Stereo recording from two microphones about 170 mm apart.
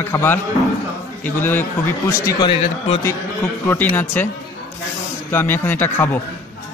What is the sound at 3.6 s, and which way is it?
Speech, 10° left (ahead or behind).